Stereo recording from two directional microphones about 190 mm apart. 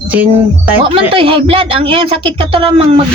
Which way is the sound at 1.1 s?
30° right (ahead or behind).